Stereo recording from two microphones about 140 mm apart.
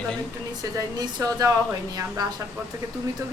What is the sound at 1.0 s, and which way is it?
Speech, 25° right (ahead or behind).